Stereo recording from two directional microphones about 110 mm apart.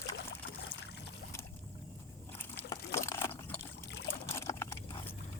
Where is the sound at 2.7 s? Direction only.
30° left (ahead or behind).